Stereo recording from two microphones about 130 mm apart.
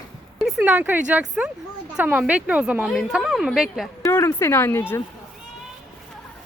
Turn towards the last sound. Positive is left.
turn(degrees=20)  # may be behind; listen again after turning